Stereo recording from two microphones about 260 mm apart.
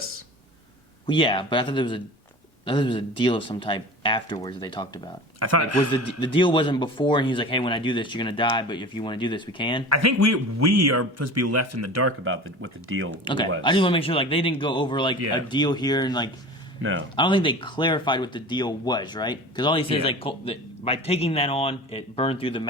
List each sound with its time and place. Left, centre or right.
1.0 s speech: centre
5.4 s speech: right
5.9 s speech: centre
9.9 s speech: right
12.2 s speech: right
13.2 s speech: centre
16.8 s speech: right
17.2 s speech: centre